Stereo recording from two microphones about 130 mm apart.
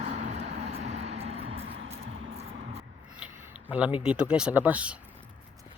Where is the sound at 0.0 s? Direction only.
55° right (ahead or behind).